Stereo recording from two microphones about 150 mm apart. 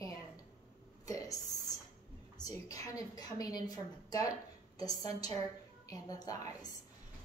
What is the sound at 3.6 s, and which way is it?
Speech, 25° left (ahead or behind).